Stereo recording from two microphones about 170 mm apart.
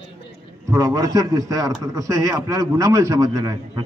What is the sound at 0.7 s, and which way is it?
A man's voice, 20° right (ahead or behind).